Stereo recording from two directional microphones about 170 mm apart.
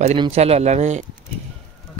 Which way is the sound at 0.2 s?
35° right (ahead or behind).